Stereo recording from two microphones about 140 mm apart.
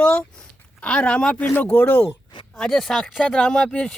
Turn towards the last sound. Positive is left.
turn(degrees=5)  # may be behind; listen again after turning